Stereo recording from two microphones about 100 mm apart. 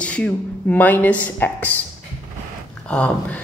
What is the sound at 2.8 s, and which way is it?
Speech, 10° left (ahead or behind).